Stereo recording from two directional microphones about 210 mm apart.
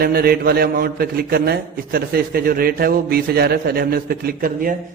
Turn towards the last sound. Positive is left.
turn(degrees=-40)  # may be behind; listen again after turning